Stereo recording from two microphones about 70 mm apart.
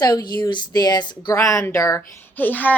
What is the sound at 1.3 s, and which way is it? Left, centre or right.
Speech, left.